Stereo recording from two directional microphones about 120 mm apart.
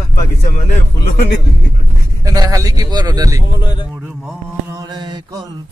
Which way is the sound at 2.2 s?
30° right (ahead or behind).